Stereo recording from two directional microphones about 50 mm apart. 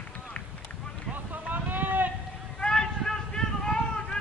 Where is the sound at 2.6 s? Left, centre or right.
Centre.